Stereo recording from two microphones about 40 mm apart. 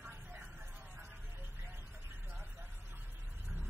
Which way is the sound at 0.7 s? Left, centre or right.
Right.